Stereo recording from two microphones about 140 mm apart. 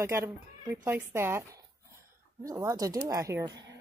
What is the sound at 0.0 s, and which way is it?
Speech, 20° right (ahead or behind).